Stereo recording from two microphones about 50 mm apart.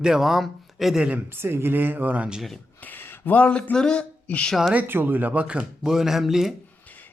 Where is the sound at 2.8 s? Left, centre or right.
Left.